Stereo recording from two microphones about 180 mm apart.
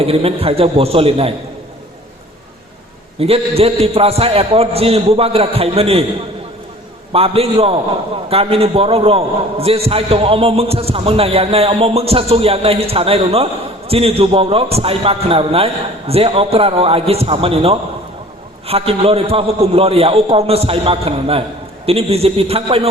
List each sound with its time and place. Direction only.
0.0 s a man's voice: 35° right (ahead or behind)
3.2 s a man's voice: 35° right (ahead or behind)
7.1 s a man's voice: 35° right (ahead or behind)